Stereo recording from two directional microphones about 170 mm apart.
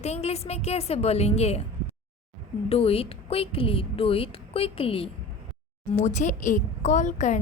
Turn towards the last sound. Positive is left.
turn(degrees=45)  # may be behind; listen again after turning